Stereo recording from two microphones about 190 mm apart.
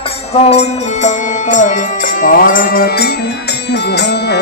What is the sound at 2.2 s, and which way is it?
Music, 45° left (ahead or behind).